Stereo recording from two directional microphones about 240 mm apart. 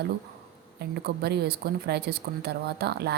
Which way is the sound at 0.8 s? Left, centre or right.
Right.